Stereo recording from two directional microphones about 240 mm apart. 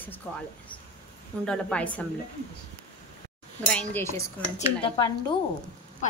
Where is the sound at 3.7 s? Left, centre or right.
Centre.